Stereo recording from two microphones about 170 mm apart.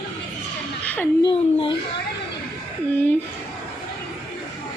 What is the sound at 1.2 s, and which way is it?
Speech, 30° left (ahead or behind).